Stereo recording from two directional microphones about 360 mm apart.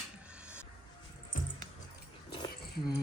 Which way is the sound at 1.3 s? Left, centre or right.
Left.